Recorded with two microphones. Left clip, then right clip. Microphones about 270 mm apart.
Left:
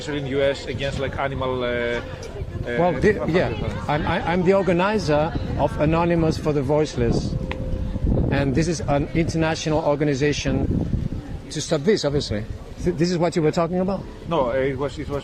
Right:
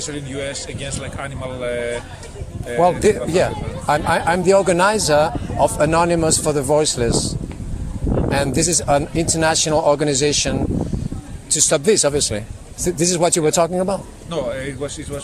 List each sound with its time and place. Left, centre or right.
0.1 s speech: right
8.3 s speech: right
14.3 s speech: right